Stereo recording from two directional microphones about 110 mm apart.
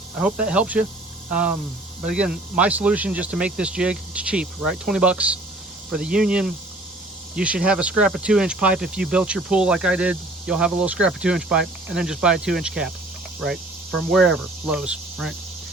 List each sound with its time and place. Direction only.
0.2 s speech: 10° right (ahead or behind)
14.1 s speech: 5° right (ahead or behind)